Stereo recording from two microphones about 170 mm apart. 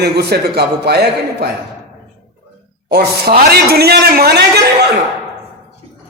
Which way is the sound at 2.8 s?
70° right (ahead or behind).